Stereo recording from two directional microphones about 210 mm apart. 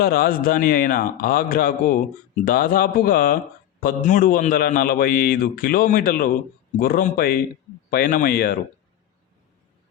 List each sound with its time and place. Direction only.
0.0 s a man's voice: 45° left (ahead or behind)